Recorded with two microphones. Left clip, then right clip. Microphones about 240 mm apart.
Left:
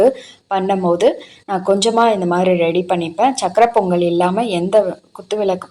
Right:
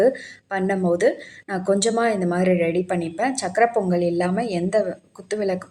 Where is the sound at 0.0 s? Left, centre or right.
Left.